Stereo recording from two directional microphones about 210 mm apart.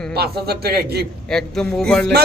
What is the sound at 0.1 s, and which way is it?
Speech, 50° right (ahead or behind).